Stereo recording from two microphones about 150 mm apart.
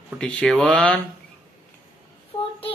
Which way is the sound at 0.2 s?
5° left (ahead or behind).